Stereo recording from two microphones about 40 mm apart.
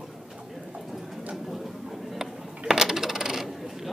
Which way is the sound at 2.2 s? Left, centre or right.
Centre.